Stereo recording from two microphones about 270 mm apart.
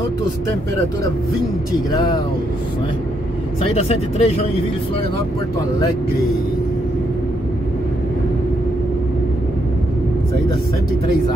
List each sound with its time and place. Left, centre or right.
1.9 s speech: centre
3.7 s speech: left